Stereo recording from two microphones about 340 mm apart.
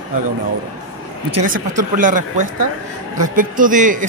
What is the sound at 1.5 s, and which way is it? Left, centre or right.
A man's voice, right.